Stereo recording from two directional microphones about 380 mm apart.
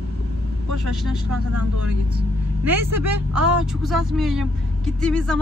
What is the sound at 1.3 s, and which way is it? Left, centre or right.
Speech, right.